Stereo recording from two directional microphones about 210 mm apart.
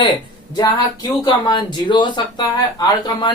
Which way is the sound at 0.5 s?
20° left (ahead or behind).